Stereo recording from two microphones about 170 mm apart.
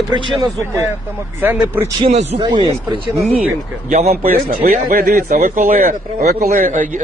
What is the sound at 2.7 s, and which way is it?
Speech, 30° right (ahead or behind).